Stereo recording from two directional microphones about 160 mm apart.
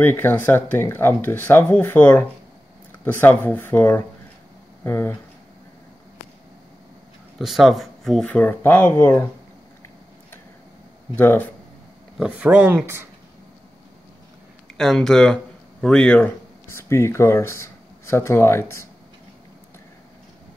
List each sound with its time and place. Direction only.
0.0 s speech: 15° left (ahead or behind)
7.3 s speech: centre (ahead or behind); by 9.3 s 15° left (ahead or behind)
11.1 s speech: 10° left (ahead or behind)
12.2 s speech: 10° right (ahead or behind)
14.8 s speech: 5° left (ahead or behind)